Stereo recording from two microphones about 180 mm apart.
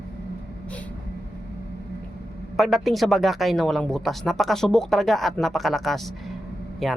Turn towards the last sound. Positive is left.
turn(degrees=0)  # may be behind; listen again after turning